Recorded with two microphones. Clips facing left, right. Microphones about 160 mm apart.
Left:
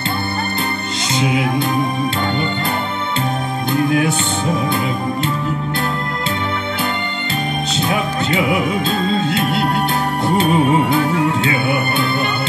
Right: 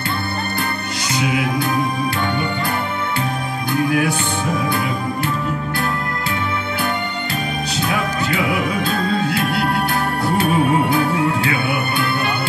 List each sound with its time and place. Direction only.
7.7 s music: 20° left (ahead or behind)